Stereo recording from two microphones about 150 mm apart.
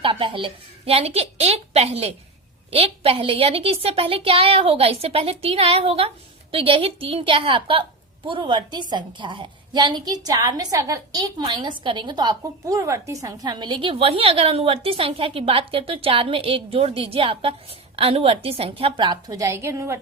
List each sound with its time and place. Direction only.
0.0 s a child's voice: 35° right (ahead or behind); by 20.0 s 20° right (ahead or behind)